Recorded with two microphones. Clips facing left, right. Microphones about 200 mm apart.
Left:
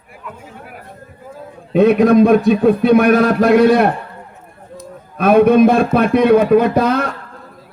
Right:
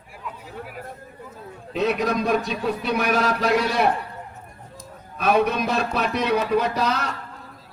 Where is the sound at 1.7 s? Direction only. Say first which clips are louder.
Left 13 dB; 55° left (ahead or behind).